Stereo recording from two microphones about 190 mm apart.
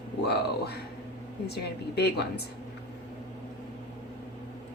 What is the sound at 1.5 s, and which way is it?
Speech, 60° left (ahead or behind).